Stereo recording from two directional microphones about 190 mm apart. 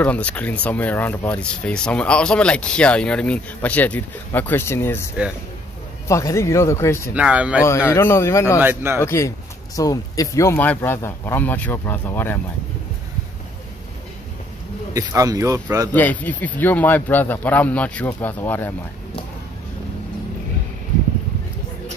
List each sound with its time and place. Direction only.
0.0 s speech: 10° left (ahead or behind)
7.2 s speech: 5° right (ahead or behind)
7.9 s speech: 15° left (ahead or behind)
8.5 s speech: 10° right (ahead or behind)
9.0 s speech: 15° left (ahead or behind)
15.0 s speech: 15° right (ahead or behind)
15.9 s speech: 10° left (ahead or behind)